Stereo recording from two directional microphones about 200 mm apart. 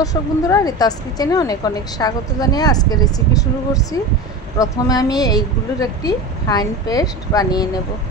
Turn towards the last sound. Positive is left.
turn(degrees=20)  # may be behind; listen again after turning